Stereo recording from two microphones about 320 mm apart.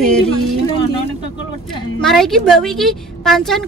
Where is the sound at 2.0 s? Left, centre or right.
Centre.